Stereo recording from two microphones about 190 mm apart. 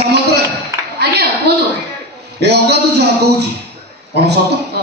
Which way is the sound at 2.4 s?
60° right (ahead or behind).